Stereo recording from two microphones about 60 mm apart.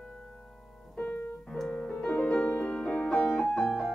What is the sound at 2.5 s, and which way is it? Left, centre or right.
Music, centre.